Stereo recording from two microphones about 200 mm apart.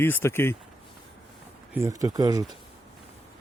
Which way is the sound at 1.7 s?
15° right (ahead or behind).